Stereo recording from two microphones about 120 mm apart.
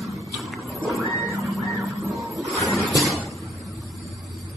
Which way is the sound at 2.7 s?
Centre (ahead or behind).